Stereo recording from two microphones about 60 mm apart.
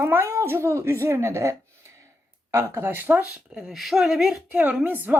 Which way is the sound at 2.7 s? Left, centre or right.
Right.